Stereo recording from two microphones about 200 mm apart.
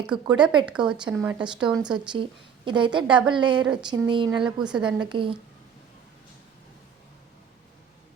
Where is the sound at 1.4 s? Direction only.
25° right (ahead or behind).